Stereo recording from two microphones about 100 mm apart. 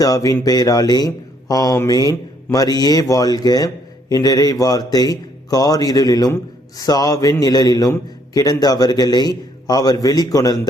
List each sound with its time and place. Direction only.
0.0 s a man's voice: 35° left (ahead or behind)